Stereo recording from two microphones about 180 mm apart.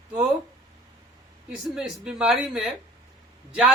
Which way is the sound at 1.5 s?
5° right (ahead or behind).